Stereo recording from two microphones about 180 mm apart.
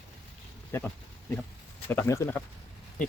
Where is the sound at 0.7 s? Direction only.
15° left (ahead or behind).